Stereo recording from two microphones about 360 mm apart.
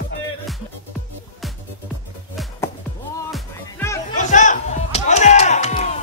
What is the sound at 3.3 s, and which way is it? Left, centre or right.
Music, centre.